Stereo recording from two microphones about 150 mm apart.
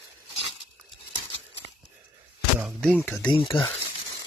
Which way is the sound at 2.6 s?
5° left (ahead or behind).